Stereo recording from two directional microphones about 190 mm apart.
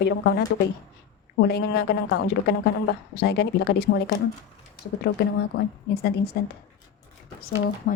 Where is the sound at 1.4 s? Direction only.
60° left (ahead or behind).